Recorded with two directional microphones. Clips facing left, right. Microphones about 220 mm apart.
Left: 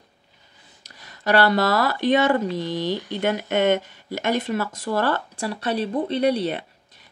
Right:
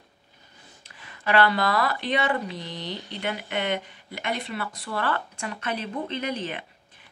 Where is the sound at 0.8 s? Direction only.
40° left (ahead or behind).